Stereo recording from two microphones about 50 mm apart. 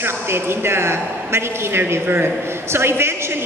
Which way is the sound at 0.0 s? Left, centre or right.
Right.